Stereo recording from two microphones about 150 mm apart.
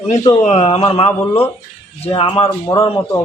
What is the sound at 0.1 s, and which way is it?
A man's voice, 50° left (ahead or behind).